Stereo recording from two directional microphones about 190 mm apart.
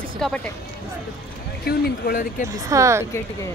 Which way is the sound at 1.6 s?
50° left (ahead or behind).